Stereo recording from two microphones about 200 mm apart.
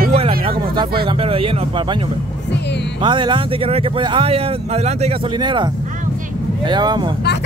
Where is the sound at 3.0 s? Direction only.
25° right (ahead or behind).